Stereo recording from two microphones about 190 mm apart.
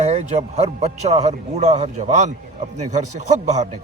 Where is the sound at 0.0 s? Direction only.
35° right (ahead or behind).